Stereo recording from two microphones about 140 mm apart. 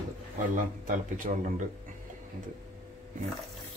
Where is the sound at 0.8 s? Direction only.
75° right (ahead or behind).